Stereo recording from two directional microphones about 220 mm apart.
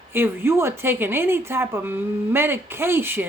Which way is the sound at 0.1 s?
10° right (ahead or behind).